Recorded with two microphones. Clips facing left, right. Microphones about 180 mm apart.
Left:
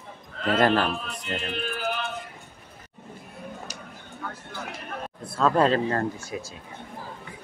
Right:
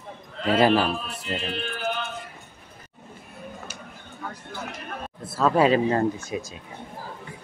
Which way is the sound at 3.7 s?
35° left (ahead or behind).